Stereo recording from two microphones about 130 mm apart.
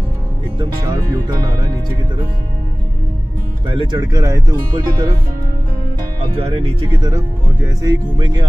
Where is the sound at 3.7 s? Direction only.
40° right (ahead or behind).